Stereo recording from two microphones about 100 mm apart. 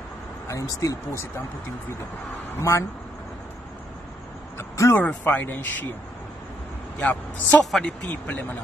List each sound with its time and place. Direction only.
0.5 s speech: 35° left (ahead or behind)
2.5 s speech: 25° left (ahead or behind)
4.6 s vehicle: 25° left (ahead or behind)
5.2 s speech: 20° left (ahead or behind)
7.0 s speech: 15° left (ahead or behind)